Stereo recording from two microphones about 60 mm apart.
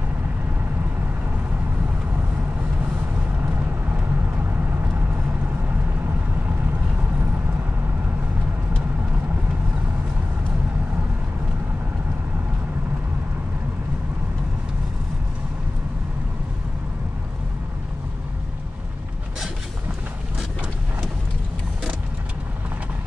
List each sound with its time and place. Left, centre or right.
3.4 s vehicle: right